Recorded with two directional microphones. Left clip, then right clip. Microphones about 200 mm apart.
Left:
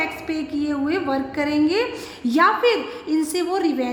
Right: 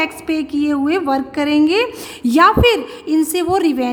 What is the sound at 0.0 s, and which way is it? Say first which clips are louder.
A woman's voice: right 6 dB; 35° right (ahead or behind).